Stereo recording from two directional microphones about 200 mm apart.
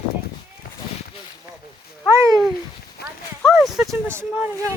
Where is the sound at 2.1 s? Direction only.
15° right (ahead or behind).